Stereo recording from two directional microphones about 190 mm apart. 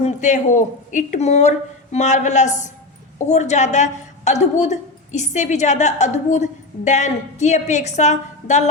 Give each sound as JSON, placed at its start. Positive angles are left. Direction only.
{"t": 0.0, "sound": "a woman's voice", "side_deg": 40}